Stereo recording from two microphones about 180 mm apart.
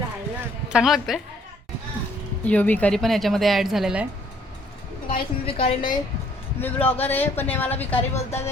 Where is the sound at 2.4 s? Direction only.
10° left (ahead or behind).